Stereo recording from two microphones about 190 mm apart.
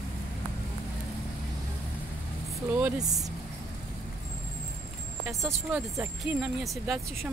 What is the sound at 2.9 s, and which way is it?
Speech, 20° right (ahead or behind).